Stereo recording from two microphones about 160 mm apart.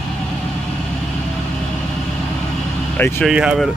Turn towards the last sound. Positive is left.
turn(degrees=-5)  # may be behind; listen again after turning